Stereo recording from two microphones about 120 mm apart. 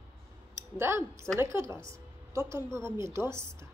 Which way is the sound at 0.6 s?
20° right (ahead or behind).